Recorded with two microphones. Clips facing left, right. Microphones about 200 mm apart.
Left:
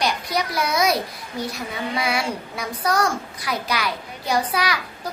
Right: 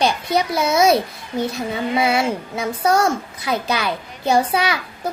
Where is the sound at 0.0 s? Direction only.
25° right (ahead or behind).